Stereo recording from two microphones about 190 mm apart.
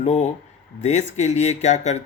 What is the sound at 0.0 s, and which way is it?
Speech, 40° left (ahead or behind).